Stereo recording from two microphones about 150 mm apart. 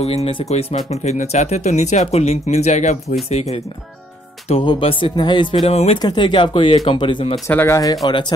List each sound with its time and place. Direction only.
0.0 s speech: 45° left (ahead or behind)
5.9 s speech: 30° left (ahead or behind)
7.4 s speech: 20° left (ahead or behind)